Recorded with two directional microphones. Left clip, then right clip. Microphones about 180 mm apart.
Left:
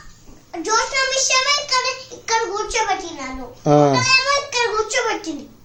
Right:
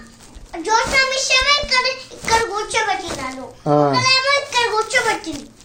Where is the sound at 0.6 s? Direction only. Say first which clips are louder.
Right 3 dB; 15° left (ahead or behind).